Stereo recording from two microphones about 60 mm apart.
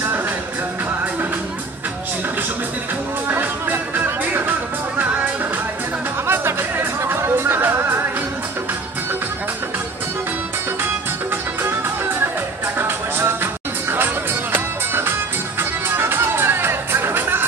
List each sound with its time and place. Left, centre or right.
3.3 s music: right
12.7 s music: right
16.0 s music: right